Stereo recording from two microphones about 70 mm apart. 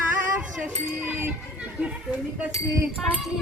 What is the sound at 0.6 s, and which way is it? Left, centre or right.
Speech, right.